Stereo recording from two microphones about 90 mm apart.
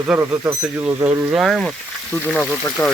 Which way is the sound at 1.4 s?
Centre (ahead or behind).